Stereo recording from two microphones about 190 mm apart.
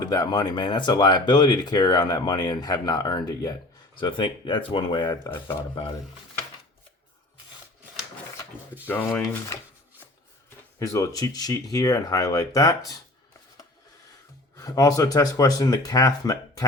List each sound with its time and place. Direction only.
0.0 s speech: 20° left (ahead or behind)
8.9 s speech: 10° left (ahead or behind)
10.8 s speech: 15° left (ahead or behind)
14.6 s speech: 20° left (ahead or behind)